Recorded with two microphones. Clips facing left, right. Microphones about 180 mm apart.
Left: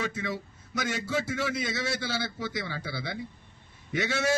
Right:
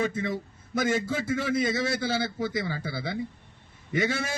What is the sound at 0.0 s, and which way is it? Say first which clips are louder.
A man's voice: right 4 dB; 50° right (ahead or behind).